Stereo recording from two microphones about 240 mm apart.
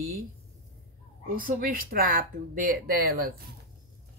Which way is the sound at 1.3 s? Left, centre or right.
Right.